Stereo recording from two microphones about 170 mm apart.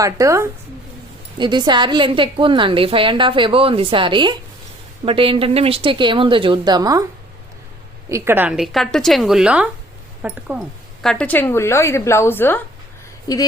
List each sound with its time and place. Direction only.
0.0 s a woman's voice: 20° right (ahead or behind)
8.1 s a woman's voice: 15° right (ahead or behind)
11.0 s a woman's voice: 5° left (ahead or behind); by 13.4 s 20° left (ahead or behind)